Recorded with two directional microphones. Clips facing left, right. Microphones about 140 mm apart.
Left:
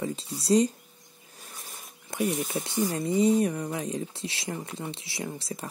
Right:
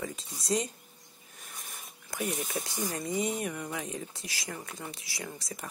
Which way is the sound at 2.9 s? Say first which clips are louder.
Left 10 dB; 30° left (ahead or behind).